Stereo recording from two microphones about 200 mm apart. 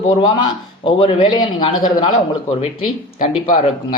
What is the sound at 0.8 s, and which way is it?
Speech, 25° left (ahead or behind).